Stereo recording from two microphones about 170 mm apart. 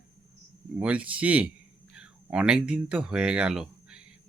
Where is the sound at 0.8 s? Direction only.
5° right (ahead or behind).